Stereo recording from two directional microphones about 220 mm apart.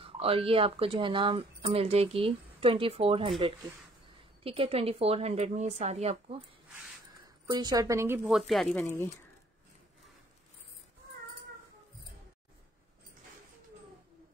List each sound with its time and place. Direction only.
0.0 s speech: 25° right (ahead or behind)
7.4 s a woman's voice: 20° right (ahead or behind); by 8.8 s centre (ahead or behind)
8.8 s speech: 10° left (ahead or behind)